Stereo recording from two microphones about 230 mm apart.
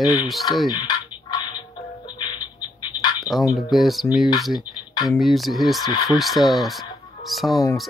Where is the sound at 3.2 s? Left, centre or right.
Centre.